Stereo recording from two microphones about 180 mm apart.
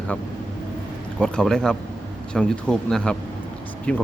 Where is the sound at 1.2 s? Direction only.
5° left (ahead or behind).